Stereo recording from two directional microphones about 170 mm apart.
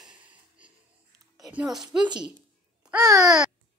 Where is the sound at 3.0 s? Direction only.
20° right (ahead or behind).